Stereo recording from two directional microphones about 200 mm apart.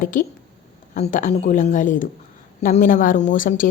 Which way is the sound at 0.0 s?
40° left (ahead or behind).